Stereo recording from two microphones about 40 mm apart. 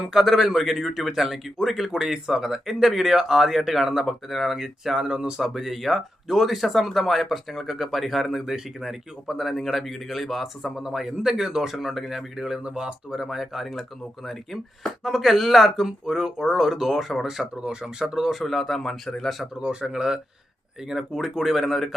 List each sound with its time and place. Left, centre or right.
0.1 s speech: centre
5.4 s speech: centre
10.8 s speech: centre
12.6 s speech: centre
15.0 s speech: centre
17.6 s speech: right
18.0 s speech: centre
19.8 s speech: centre